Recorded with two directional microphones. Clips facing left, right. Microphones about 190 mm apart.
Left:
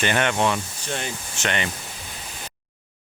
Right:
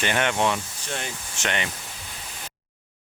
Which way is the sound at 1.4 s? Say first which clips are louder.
Left 2 dB; 15° right (ahead or behind).